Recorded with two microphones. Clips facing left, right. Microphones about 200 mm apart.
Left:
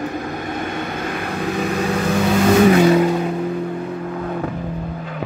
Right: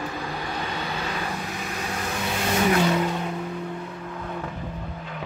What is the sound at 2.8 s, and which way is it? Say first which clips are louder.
Vehicle: left 9 dB; 10° left (ahead or behind).